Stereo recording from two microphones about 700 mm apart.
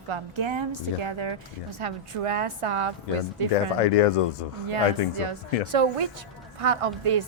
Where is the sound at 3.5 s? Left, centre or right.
Left.